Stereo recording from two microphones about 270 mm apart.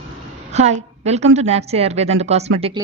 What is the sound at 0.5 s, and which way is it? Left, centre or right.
A woman's voice, right.